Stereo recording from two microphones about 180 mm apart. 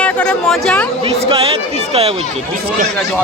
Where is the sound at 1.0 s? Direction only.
30° right (ahead or behind).